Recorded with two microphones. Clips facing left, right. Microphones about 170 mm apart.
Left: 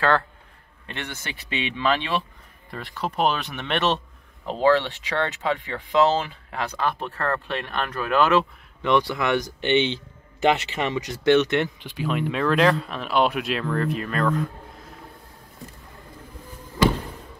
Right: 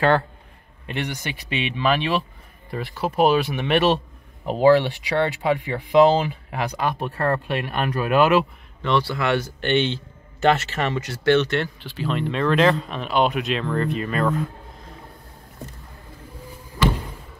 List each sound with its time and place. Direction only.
0.8 s speech: 15° right (ahead or behind)
8.8 s speech: 15° left (ahead or behind); by 14.3 s 5° right (ahead or behind)